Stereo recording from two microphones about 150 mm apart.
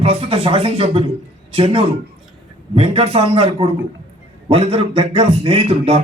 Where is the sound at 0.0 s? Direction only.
40° right (ahead or behind).